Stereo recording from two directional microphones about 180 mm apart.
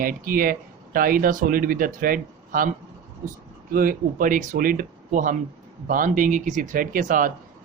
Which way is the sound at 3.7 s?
50° right (ahead or behind).